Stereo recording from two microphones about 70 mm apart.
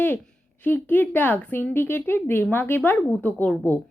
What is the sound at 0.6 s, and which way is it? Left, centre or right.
A woman's voice, left.